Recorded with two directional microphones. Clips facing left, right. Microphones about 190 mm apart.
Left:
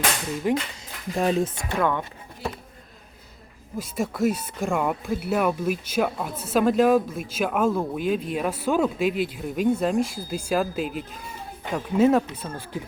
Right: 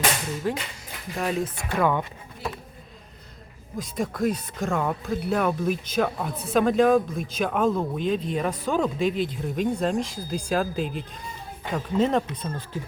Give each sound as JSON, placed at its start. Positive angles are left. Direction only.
{"t": 0.4, "sound": "speech", "side_deg": 15}
{"t": 1.7, "sound": "speech", "side_deg": -10}
{"t": 3.8, "sound": "speech", "side_deg": 5}